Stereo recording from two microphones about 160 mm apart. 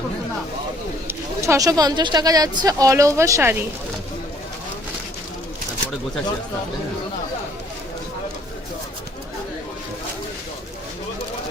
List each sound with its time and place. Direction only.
1.0 s speech: 20° right (ahead or behind)